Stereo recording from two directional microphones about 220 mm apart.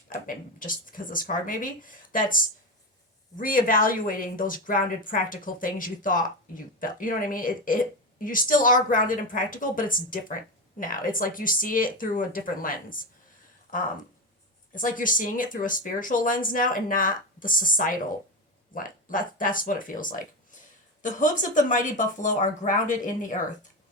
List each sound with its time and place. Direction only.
0.1 s a woman's voice: 40° left (ahead or behind)
14.8 s a woman's voice: 40° left (ahead or behind)